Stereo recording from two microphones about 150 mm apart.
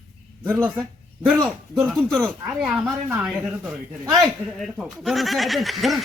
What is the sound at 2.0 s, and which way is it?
Speech, 5° left (ahead or behind).